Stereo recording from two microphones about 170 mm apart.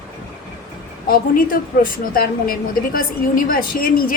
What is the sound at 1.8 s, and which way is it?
A woman's voice, 55° left (ahead or behind).